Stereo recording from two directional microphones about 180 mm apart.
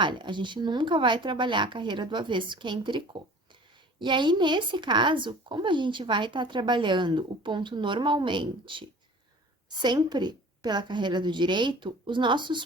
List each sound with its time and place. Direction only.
0.0 s speech: 25° right (ahead or behind)